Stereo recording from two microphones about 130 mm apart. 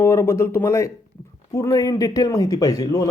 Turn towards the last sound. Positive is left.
turn(degrees=30)  # may be behind; listen again after turning